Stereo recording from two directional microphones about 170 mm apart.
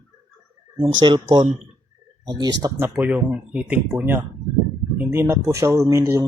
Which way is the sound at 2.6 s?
15° right (ahead or behind).